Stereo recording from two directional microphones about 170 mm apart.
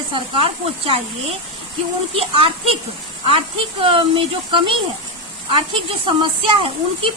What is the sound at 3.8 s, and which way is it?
Speech, 30° right (ahead or behind).